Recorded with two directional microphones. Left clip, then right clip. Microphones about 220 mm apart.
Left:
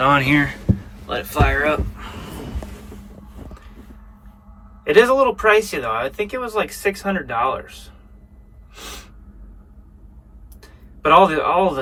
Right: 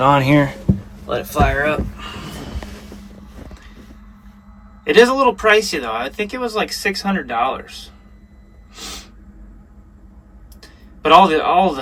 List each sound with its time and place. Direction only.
0.0 s speech: 20° right (ahead or behind)
4.8 s speech: 5° right (ahead or behind)
10.6 s speech: 5° right (ahead or behind)